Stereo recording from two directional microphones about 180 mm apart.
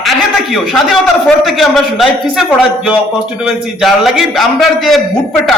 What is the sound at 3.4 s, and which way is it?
A man's voice, centre (ahead or behind).